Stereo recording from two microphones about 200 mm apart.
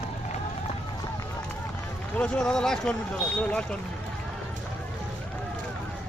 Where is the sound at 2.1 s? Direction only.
5° left (ahead or behind).